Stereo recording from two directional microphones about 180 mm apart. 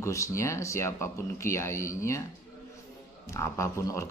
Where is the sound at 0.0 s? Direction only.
15° left (ahead or behind).